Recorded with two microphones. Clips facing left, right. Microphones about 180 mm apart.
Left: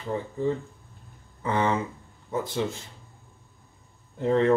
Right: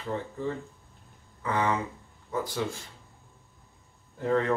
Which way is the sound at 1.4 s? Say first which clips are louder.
Left 3 dB; 25° left (ahead or behind).